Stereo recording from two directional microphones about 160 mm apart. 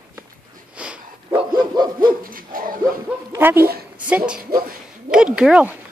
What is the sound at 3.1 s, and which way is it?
Bow-wow, 15° right (ahead or behind).